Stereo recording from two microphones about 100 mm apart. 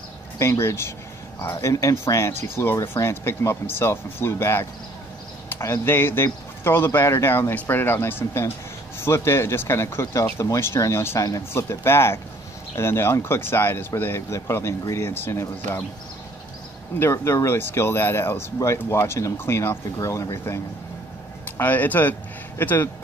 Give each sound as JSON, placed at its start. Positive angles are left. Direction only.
{"t": 0.4, "sound": "speech", "side_deg": 25}
{"t": 17.0, "sound": "speech", "side_deg": 30}
{"t": 21.5, "sound": "speech", "side_deg": 15}